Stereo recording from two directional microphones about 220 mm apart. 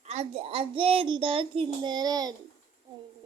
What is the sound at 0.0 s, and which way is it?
A child's voice, 30° right (ahead or behind).